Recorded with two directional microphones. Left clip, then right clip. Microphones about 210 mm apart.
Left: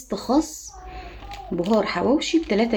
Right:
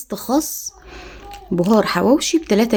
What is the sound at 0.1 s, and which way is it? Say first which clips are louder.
Speech: right 2 dB; 50° right (ahead or behind).